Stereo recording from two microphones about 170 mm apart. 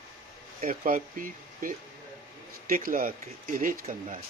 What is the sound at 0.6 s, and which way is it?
Speech, 55° right (ahead or behind).